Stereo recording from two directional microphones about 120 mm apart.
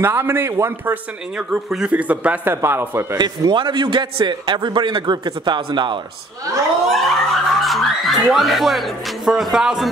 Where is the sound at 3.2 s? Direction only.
40° right (ahead or behind).